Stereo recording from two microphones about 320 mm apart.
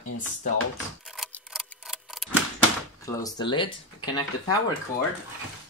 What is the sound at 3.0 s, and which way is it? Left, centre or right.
Speech, centre.